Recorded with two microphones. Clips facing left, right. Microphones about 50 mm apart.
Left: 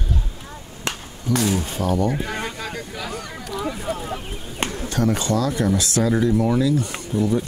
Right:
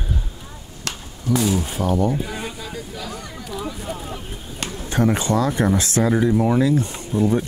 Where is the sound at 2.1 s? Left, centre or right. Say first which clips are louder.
Even; left.